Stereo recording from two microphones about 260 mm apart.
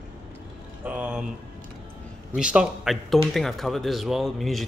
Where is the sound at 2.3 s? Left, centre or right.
Centre.